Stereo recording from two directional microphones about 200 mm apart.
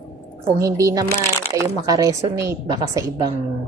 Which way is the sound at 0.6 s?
15° right (ahead or behind).